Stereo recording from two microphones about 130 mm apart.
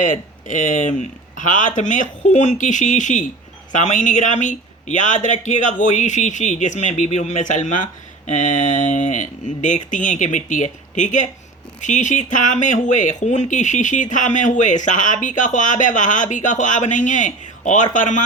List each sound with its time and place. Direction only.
0.0 s speech: 80° left